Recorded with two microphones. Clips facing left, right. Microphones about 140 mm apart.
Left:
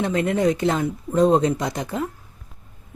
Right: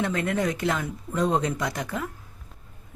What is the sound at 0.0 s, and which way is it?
Speech, 25° left (ahead or behind).